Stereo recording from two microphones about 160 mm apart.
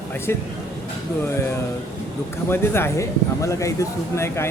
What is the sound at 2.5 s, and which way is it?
Speech, 15° left (ahead or behind).